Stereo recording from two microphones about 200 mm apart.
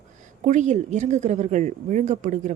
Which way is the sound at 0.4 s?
35° right (ahead or behind).